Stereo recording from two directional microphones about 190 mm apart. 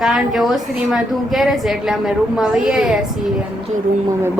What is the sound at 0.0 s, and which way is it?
A woman's voice, centre (ahead or behind).